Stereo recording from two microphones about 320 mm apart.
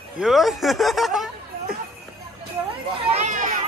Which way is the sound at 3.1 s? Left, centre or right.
Right.